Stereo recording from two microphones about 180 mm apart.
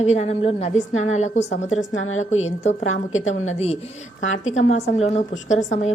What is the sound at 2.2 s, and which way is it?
A woman's voice, 40° left (ahead or behind).